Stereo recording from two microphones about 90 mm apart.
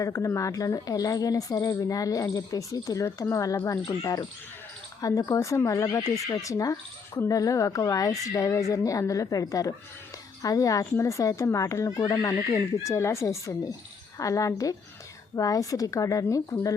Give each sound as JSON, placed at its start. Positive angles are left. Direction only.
{"t": 0.0, "sound": "speech", "side_deg": 35}